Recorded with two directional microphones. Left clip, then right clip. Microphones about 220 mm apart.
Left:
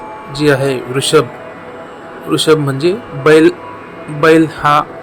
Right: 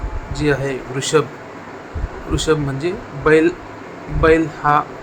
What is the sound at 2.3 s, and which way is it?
Speech, 20° left (ahead or behind).